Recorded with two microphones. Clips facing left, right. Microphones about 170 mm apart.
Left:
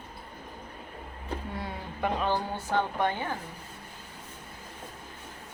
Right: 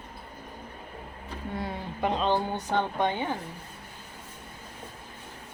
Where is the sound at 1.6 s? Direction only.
20° right (ahead or behind).